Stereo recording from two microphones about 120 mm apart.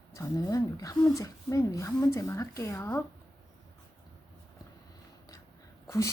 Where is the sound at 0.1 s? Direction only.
30° left (ahead or behind).